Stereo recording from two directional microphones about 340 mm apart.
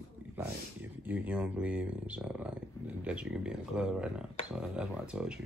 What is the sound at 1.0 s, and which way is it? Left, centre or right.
Speech, centre.